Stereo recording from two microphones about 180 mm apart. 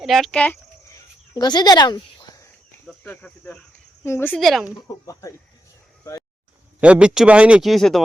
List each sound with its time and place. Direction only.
0.0 s a sound: centre (ahead or behind); by 2.5 s 20° left (ahead or behind)
2.8 s speech: 10° left (ahead or behind)
4.4 s speech: centre (ahead or behind)
6.7 s speech: 5° right (ahead or behind)